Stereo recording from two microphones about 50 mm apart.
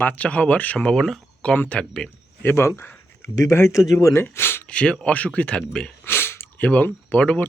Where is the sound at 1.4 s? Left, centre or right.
Left.